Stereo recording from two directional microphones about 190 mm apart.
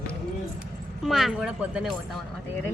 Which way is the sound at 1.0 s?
Centre (ahead or behind).